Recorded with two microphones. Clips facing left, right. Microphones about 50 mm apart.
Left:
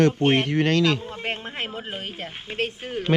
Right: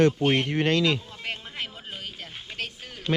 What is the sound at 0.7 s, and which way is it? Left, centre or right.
Speech, left.